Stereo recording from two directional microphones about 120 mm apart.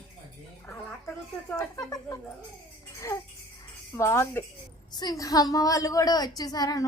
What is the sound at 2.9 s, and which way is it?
Music, 25° left (ahead or behind).